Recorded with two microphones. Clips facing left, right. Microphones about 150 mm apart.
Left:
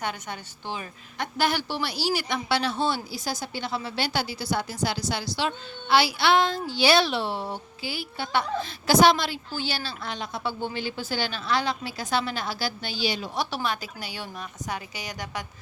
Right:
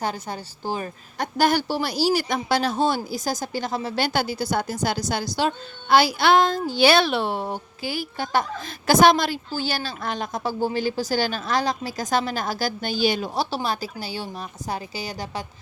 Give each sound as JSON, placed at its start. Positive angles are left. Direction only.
{"t": 0.0, "sound": "a woman's voice", "side_deg": -35}
{"t": 13.3, "sound": "a woman's voice", "side_deg": -30}